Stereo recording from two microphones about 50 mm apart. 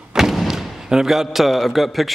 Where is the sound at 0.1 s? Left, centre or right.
Centre.